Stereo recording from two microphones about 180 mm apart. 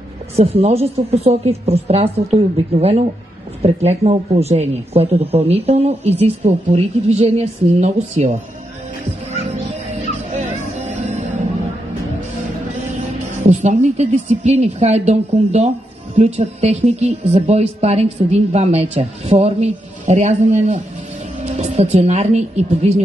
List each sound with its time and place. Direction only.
0.4 s speech: 35° right (ahead or behind)
10.3 s music: 40° right (ahead or behind)
12.9 s speech: 40° right (ahead or behind)